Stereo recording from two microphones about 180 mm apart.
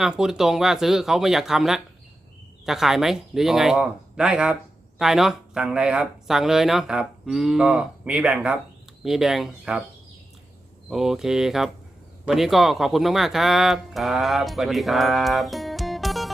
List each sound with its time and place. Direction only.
0.0 s speech: 5° right (ahead or behind)
10.8 s speech: centre (ahead or behind)